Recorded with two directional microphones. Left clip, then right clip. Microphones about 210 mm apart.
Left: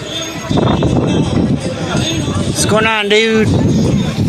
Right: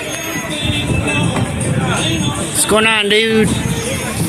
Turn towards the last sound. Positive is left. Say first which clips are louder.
# left 1 dB
turn(degrees=0)  # may be behind; listen again after turning